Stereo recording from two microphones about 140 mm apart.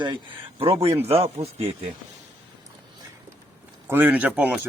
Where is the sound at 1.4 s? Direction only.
45° right (ahead or behind).